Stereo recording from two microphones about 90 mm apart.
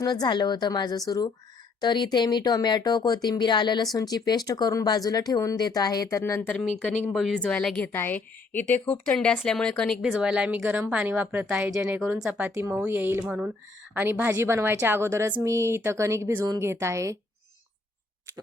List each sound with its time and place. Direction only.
0.0 s speech: 50° left (ahead or behind); by 6.4 s 35° left (ahead or behind)
7.1 s speech: centre (ahead or behind)
7.3 s a woman's voice: 10° left (ahead or behind)
7.9 s a woman's voice: 20° left (ahead or behind)
10.0 s a woman's voice: 5° right (ahead or behind)
12.7 s a woman's voice: 20° right (ahead or behind)
13.1 s a woman's voice: 15° right (ahead or behind); by 17.2 s 35° right (ahead or behind)